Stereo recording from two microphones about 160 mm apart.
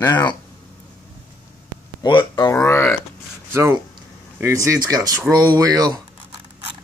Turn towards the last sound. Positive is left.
turn(degrees=-25)  # may be behind; listen again after turning